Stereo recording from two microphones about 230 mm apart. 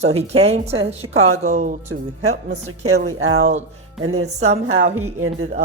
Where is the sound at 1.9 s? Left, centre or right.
Right.